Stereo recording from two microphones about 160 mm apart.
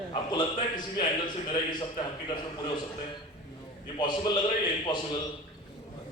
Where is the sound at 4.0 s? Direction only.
30° left (ahead or behind).